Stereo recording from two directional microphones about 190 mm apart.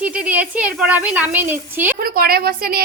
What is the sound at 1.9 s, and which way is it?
Speech, 50° right (ahead or behind).